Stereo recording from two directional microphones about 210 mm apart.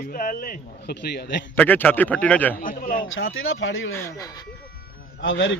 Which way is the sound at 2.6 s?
40° left (ahead or behind).